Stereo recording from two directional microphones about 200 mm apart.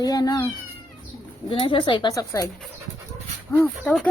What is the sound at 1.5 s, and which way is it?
Speech, 25° left (ahead or behind).